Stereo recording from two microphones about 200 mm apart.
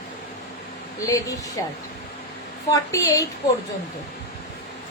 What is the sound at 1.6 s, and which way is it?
Child singing, 15° left (ahead or behind).